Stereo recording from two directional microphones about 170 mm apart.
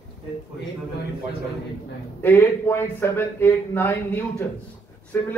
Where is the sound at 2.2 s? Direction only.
15° left (ahead or behind).